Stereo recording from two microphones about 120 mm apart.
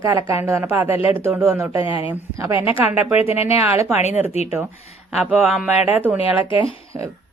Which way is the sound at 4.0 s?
70° left (ahead or behind).